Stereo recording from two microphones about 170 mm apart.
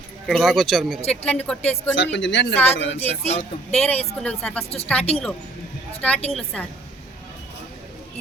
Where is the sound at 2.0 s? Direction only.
90° left.